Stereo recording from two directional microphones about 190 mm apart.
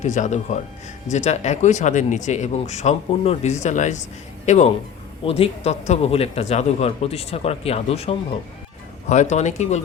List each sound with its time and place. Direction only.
0.0 s speech: 40° left (ahead or behind)